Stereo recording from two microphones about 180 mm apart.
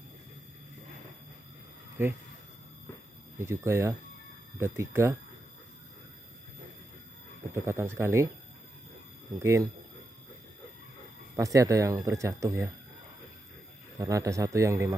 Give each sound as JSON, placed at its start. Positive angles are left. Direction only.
{"t": 3.4, "sound": "speech", "side_deg": -15}
{"t": 7.5, "sound": "speech", "side_deg": -15}
{"t": 9.3, "sound": "speech", "side_deg": -20}
{"t": 11.3, "sound": "speech", "side_deg": -15}
{"t": 13.9, "sound": "speech", "side_deg": -20}